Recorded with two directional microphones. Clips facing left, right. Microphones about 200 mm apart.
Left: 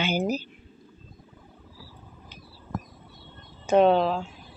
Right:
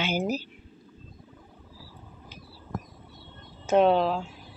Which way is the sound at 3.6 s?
Centre (ahead or behind).